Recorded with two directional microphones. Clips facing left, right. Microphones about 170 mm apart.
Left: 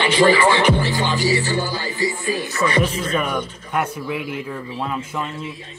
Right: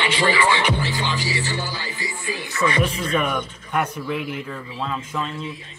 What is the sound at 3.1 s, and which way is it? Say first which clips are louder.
Speech: even; centre (ahead or behind).